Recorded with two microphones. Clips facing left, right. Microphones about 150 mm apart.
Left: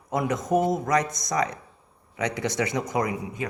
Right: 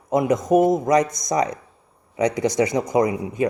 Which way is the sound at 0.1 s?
20° right (ahead or behind).